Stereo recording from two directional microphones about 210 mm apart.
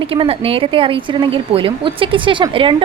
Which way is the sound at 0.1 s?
25° right (ahead or behind).